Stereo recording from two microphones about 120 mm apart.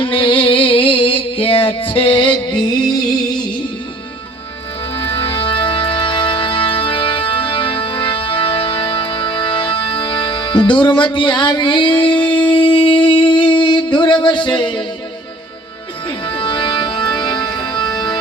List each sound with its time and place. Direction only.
0.0 s music: 45° left (ahead or behind)
4.9 s music: 45° left (ahead or behind)
16.0 s music: 40° left (ahead or behind)